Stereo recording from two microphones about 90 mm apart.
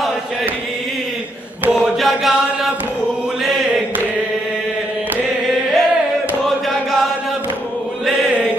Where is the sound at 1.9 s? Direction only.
Centre (ahead or behind).